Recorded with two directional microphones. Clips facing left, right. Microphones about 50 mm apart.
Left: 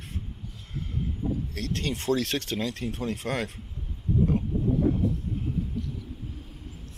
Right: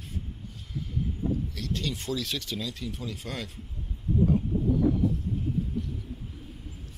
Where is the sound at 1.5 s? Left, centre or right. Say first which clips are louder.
Left 2 dB; left.